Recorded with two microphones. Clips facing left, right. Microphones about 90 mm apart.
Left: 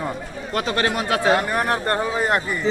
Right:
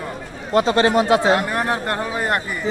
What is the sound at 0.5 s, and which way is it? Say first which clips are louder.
Speech: right 7 dB; 25° right (ahead or behind).